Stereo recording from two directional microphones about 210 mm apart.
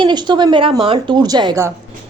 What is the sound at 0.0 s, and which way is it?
A woman's voice, 20° right (ahead or behind).